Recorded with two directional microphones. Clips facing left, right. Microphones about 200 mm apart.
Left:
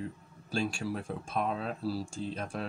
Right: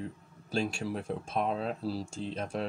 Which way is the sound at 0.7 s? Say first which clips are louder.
Right 1 dB; 20° right (ahead or behind).